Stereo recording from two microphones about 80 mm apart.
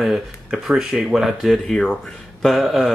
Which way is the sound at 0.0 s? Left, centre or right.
Centre.